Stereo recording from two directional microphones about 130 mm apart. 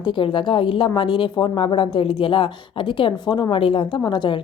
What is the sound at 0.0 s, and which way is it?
Speech, 40° left (ahead or behind).